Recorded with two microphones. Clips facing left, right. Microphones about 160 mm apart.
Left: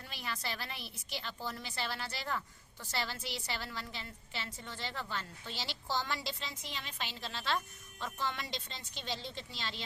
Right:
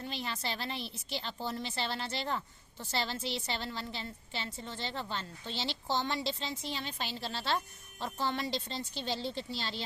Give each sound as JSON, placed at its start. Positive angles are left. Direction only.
{"t": 0.0, "sound": "a woman's voice", "side_deg": -25}